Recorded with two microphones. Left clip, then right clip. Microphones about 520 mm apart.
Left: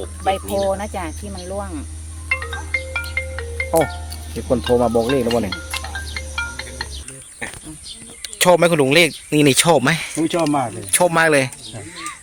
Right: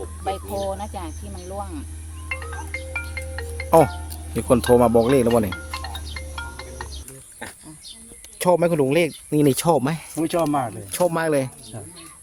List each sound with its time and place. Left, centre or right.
0.3 s speech: centre
2.3 s marimba: right
4.4 s speech: right
6.1 s music: right
8.2 s speech: right